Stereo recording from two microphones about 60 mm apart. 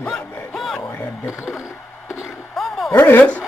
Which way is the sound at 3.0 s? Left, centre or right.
Left.